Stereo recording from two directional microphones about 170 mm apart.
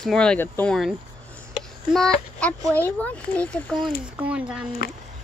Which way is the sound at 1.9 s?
5° left (ahead or behind).